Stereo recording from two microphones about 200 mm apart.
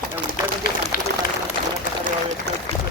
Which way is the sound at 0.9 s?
45° left (ahead or behind).